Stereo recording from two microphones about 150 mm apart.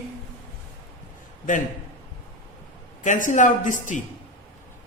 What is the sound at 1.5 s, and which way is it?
Speech, 60° left (ahead or behind).